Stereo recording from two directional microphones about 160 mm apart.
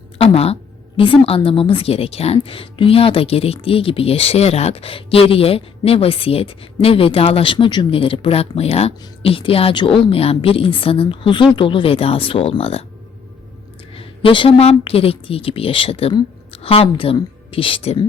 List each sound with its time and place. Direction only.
0.2 s a sound: 40° left (ahead or behind)
0.9 s a woman's voice: 35° left (ahead or behind)
13.9 s a woman's voice: 35° left (ahead or behind)